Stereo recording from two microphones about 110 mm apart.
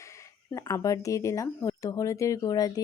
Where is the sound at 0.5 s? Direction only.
30° left (ahead or behind).